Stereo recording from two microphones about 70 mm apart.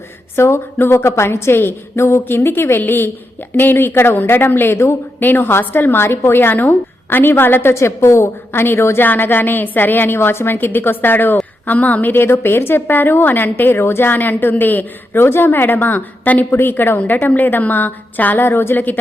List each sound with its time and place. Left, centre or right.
0.3 s a woman's voice: left